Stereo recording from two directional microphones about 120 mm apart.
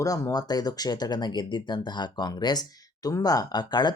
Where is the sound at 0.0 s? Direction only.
30° left (ahead or behind).